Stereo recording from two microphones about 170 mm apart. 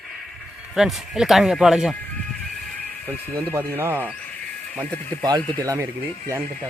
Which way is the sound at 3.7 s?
10° right (ahead or behind).